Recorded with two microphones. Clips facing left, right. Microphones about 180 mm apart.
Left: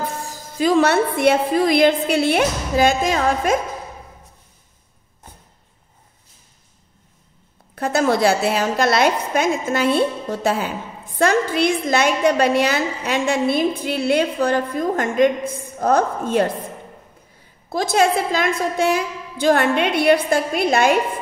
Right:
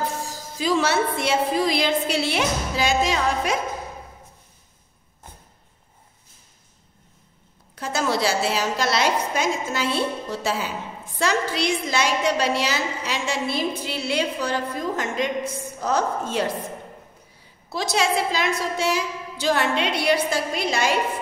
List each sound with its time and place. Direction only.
0.0 s a woman's voice: 55° left (ahead or behind)
7.7 s a woman's voice: 55° left (ahead or behind)
17.6 s a woman's voice: 50° left (ahead or behind)